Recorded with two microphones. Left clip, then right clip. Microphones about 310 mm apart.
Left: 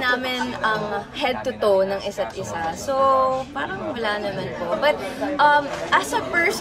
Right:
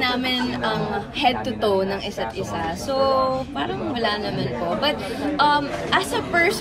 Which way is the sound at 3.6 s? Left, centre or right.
Centre.